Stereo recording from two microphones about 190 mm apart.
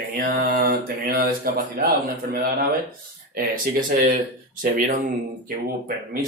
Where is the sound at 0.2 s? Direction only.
50° right (ahead or behind).